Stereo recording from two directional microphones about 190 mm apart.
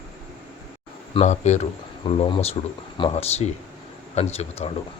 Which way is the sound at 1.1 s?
35° left (ahead or behind).